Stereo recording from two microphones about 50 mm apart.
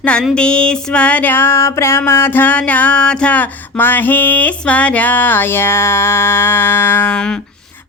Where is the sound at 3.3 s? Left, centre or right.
Left.